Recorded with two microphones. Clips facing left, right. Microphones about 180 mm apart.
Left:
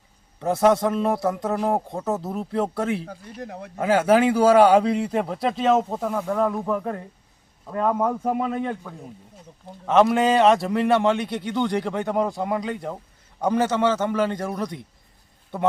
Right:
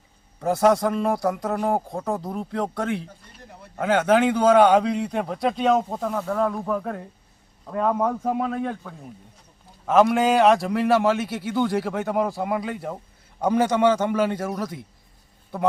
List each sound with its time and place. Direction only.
0.3 s a man's voice: centre (ahead or behind)
3.4 s speech: 90° left
3.8 s a man's voice: 5° left (ahead or behind)